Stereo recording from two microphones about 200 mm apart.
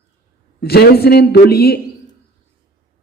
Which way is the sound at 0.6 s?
55° left (ahead or behind).